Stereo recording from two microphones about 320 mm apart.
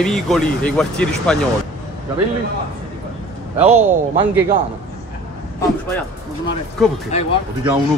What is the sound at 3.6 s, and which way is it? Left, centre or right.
Speech, centre.